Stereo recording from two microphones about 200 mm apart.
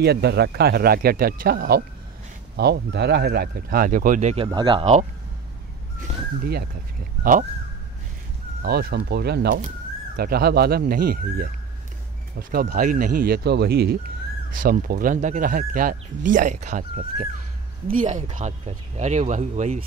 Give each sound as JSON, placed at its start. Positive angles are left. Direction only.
{"t": 0.0, "sound": "speech", "side_deg": -55}
{"t": 4.5, "sound": "speech", "side_deg": -25}
{"t": 5.9, "sound": "speech", "side_deg": -50}
{"t": 8.6, "sound": "speech", "side_deg": -50}